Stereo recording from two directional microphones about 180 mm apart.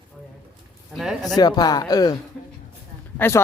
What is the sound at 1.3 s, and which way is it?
Speech, 20° left (ahead or behind).